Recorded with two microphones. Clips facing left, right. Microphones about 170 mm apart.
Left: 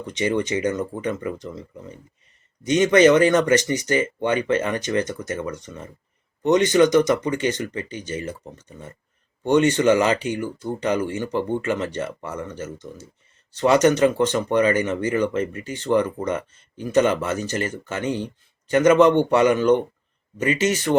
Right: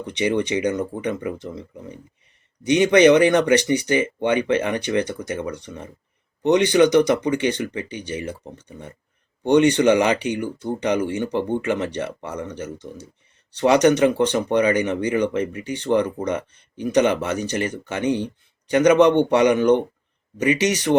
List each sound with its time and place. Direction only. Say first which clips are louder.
0.2 s speech: right 1 dB; 15° right (ahead or behind)
9.4 s speech: right 2 dB; 15° right (ahead or behind)